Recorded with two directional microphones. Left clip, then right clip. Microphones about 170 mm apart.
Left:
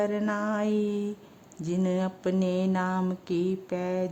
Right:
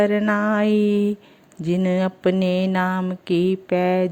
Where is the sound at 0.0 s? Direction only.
20° right (ahead or behind).